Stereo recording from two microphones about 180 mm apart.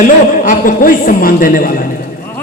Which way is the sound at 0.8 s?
50° left (ahead or behind).